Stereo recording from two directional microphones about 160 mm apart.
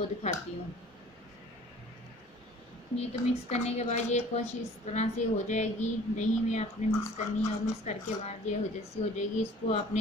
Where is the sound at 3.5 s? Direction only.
45° left (ahead or behind).